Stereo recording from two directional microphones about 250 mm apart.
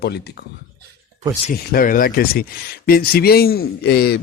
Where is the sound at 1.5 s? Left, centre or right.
Left.